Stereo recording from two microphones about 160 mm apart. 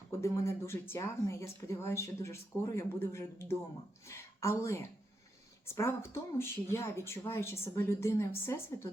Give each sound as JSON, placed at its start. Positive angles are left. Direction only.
{"t": 0.2, "sound": "a woman's voice", "side_deg": 15}